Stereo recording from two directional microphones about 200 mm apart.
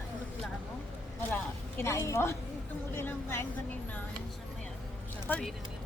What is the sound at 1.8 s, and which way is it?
Speech, 10° left (ahead or behind).